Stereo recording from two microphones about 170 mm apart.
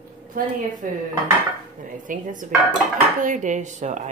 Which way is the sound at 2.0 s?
50° right (ahead or behind).